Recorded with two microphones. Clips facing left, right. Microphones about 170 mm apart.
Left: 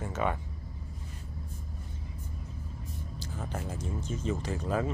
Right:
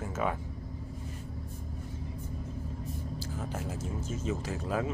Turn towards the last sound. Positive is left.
turn(degrees=-5)  # may be behind; listen again after turning